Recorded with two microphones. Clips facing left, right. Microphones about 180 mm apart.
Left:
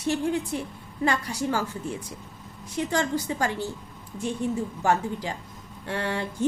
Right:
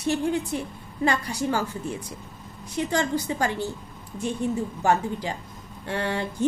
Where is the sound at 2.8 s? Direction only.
20° right (ahead or behind).